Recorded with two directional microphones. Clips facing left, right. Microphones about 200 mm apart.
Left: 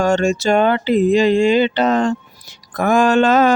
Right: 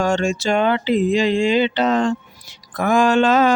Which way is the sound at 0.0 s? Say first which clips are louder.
Left 3 dB; 45° left (ahead or behind).